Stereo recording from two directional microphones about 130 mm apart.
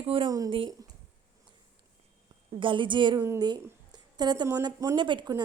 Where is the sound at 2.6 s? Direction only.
40° right (ahead or behind).